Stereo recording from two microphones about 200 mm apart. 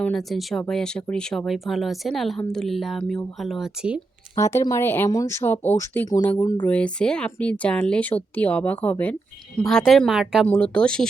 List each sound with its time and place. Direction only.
0.0 s a woman's voice: centre (ahead or behind)
4.4 s a woman's voice: 15° left (ahead or behind)